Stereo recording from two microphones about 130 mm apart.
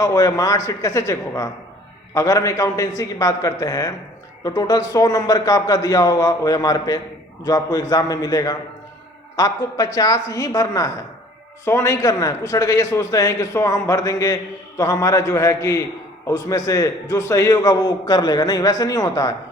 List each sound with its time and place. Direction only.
0.0 s a man's voice: 25° left (ahead or behind)